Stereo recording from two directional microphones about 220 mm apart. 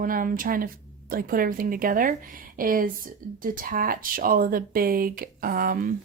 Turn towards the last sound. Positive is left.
turn(degrees=-40)  # may be behind; listen again after turning